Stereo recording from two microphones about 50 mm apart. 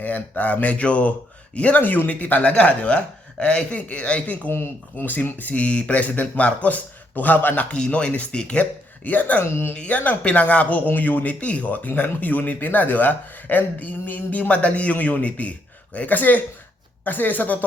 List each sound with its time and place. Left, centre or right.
0.0 s speech: left
4.5 s speech: left
9.0 s speech: left
9.4 s speech: left
9.8 s speech: left